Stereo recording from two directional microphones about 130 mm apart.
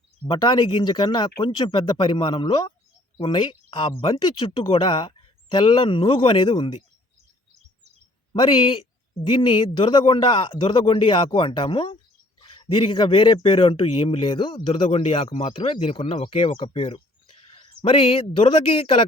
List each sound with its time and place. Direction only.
0.3 s speech: 35° left (ahead or behind)
8.3 s speech: 40° left (ahead or behind)
14.8 s speech: 50° left (ahead or behind)